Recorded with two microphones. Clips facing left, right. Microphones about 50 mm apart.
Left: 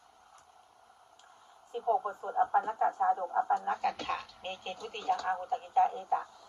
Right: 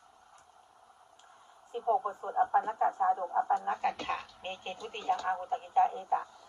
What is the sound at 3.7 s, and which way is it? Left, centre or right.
A woman's voice, right.